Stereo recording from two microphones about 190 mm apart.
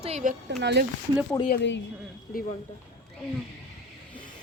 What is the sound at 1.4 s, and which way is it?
Speech, 60° left (ahead or behind).